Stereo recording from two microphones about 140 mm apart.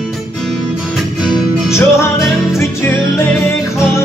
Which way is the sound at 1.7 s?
20° left (ahead or behind).